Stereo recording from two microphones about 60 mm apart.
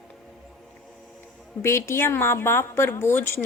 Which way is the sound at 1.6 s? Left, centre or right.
Left.